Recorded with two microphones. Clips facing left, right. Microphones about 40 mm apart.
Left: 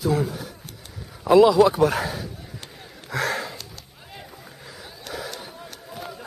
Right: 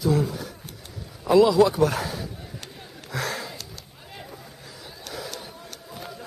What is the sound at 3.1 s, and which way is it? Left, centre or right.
Sniff, left.